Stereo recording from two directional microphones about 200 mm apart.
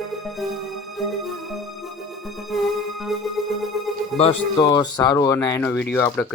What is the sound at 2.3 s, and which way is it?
Speech, centre (ahead or behind).